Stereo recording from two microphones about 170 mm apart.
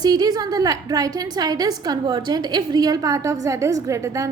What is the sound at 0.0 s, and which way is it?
A woman's voice, 25° right (ahead or behind).